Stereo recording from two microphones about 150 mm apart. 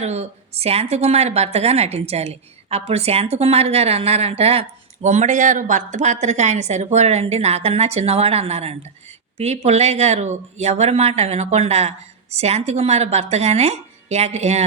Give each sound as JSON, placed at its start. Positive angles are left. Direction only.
{"t": 0.0, "sound": "speech", "side_deg": -45}